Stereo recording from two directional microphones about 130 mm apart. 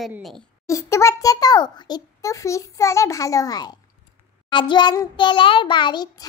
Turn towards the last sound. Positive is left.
turn(degrees=35)  # may be behind; listen again after turning